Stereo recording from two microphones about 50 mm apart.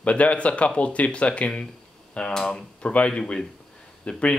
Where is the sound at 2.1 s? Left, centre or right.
Centre.